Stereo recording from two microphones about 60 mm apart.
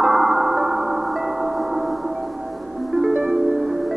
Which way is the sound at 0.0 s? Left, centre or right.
Centre.